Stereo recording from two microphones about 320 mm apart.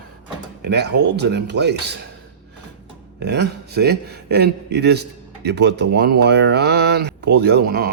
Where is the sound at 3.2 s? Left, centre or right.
Right.